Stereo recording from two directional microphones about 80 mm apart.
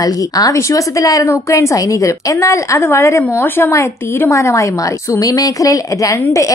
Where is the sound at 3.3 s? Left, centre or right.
Left.